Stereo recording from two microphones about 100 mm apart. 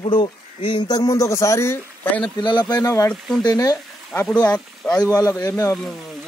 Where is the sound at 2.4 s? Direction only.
50° left (ahead or behind).